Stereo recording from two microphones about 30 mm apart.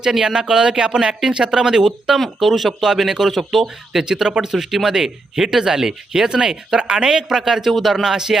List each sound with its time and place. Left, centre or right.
0.0 s speech: centre
2.1 s speech: centre
4.0 s speech: centre
7.4 s speech: centre